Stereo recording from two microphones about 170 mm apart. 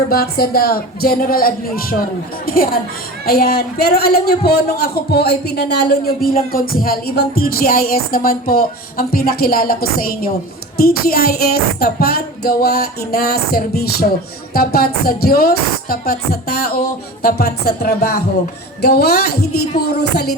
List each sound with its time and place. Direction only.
0.1 s a man's voice: 65° left (ahead or behind)
3.2 s a man's voice: 65° left (ahead or behind)